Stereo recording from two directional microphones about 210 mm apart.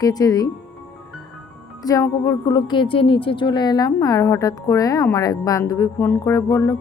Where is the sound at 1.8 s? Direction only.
15° left (ahead or behind).